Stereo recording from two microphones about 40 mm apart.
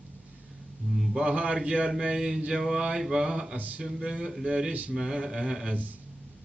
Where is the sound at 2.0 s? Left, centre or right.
Centre.